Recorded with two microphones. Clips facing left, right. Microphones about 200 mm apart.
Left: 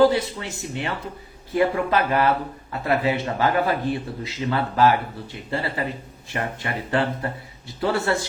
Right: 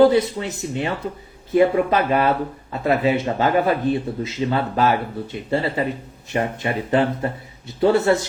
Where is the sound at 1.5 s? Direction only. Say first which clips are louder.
Right 4 dB; 20° right (ahead or behind).